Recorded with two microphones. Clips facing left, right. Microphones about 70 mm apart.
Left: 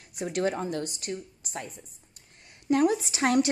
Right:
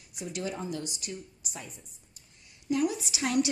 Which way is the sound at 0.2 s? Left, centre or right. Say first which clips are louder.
Left 7 dB; left.